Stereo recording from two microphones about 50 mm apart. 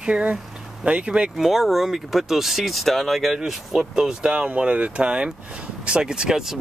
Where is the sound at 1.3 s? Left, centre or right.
Centre.